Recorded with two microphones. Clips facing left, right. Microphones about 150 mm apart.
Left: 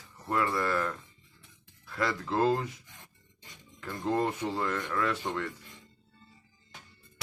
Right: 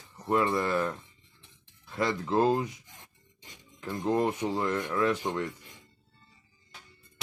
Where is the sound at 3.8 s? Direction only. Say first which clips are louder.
Right 2 dB; 15° right (ahead or behind).